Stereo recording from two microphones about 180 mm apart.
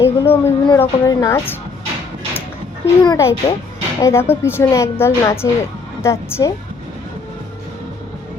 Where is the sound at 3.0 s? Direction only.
20° left (ahead or behind).